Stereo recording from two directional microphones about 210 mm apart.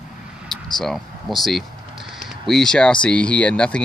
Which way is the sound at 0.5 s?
Centre (ahead or behind).